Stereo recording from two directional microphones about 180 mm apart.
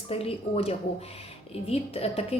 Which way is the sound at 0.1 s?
35° left (ahead or behind).